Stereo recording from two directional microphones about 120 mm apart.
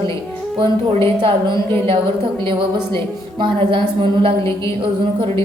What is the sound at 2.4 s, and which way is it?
A woman's voice, 45° right (ahead or behind).